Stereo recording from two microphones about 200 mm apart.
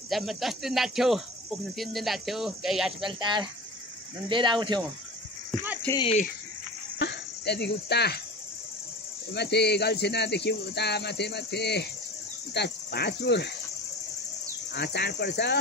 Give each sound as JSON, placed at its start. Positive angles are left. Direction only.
{"t": 0.1, "sound": "speech", "side_deg": 0}
{"t": 3.1, "sound": "speech", "side_deg": -20}
{"t": 5.9, "sound": "speech", "side_deg": 30}
{"t": 7.0, "sound": "speech", "side_deg": 55}
{"t": 9.3, "sound": "speech", "side_deg": 55}
{"t": 14.7, "sound": "speech", "side_deg": 55}